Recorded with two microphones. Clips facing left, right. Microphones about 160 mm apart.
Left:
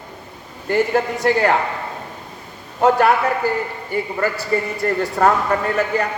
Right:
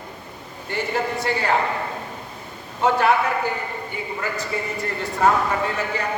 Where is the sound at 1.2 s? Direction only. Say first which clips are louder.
Left 9 dB; 50° left (ahead or behind).